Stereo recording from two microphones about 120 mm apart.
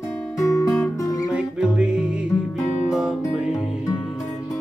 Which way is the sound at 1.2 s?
10° right (ahead or behind).